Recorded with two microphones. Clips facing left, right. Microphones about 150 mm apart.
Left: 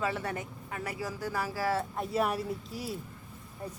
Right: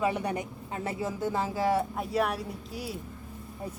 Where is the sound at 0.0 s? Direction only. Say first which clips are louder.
Right 4 dB; 15° right (ahead or behind).